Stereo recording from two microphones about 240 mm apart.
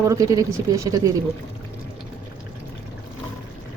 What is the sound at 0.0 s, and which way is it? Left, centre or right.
Speech, centre.